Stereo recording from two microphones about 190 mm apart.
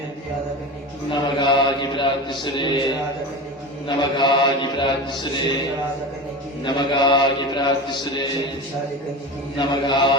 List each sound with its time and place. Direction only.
1.1 s mantra: 25° left (ahead or behind)
6.7 s mantra: 25° left (ahead or behind)
9.6 s mantra: 25° left (ahead or behind)